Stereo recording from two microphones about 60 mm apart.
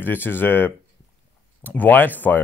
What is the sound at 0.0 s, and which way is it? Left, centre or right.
Speech, left.